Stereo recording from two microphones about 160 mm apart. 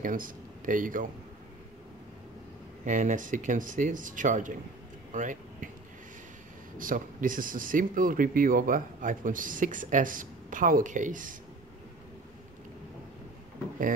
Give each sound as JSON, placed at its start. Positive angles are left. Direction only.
{"t": 0.0, "sound": "speech", "side_deg": -55}
{"t": 2.8, "sound": "speech", "side_deg": -50}
{"t": 5.1, "sound": "a sound", "side_deg": -55}
{"t": 6.8, "sound": "speech", "side_deg": -55}